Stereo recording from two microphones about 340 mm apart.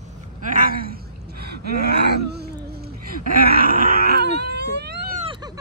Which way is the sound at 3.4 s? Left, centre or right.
Right.